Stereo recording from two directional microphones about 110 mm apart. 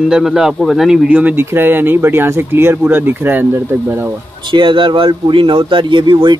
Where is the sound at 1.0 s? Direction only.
15° right (ahead or behind).